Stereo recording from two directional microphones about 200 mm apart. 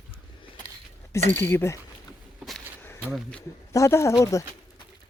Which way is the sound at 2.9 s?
Centre (ahead or behind).